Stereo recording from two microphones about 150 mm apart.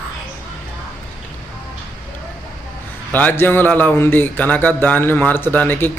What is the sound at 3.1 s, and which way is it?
A man's voice, 10° left (ahead or behind).